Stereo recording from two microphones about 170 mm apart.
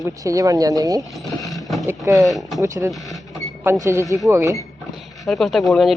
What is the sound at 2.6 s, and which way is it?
Speech, 20° right (ahead or behind).